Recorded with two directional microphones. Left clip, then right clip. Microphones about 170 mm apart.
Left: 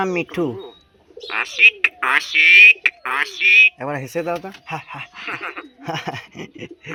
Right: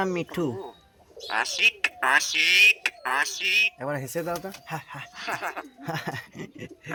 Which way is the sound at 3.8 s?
25° left (ahead or behind).